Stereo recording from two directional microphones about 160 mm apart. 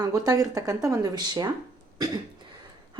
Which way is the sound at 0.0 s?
20° right (ahead or behind).